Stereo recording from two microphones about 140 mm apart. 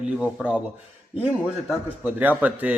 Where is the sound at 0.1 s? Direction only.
5° right (ahead or behind).